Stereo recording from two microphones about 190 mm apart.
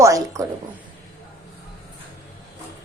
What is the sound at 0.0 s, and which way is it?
Speech, 15° right (ahead or behind).